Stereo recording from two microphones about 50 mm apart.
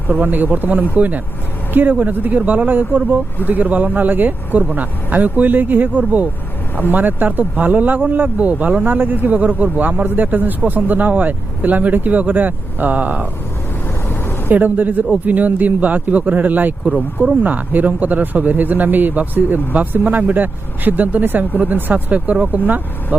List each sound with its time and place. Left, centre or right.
0.1 s speech: right
14.1 s vehicle: left
14.5 s speech: right